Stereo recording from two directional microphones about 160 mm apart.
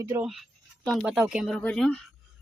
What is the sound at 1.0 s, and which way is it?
Speech, 5° right (ahead or behind).